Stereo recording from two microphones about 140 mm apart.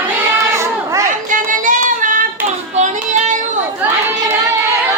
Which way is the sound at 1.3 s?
70° right (ahead or behind).